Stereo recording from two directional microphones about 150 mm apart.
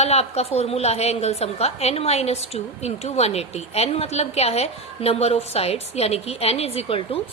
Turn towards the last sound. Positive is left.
turn(degrees=40)  # may be behind; listen again after turning